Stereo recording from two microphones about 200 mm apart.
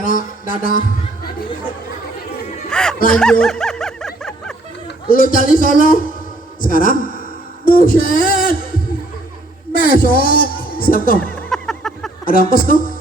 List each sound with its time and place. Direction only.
0.0 s a sound: 45° left (ahead or behind)
2.6 s speech: 5° left (ahead or behind)
3.1 s snicker: 5° left (ahead or behind)
5.0 s a man's voice: 45° left (ahead or behind)
9.8 s speech: 45° left (ahead or behind)
11.2 s a sound: 5° left (ahead or behind)
12.2 s a man's voice: 45° left (ahead or behind)